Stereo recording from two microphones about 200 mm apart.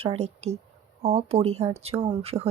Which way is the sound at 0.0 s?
30° right (ahead or behind).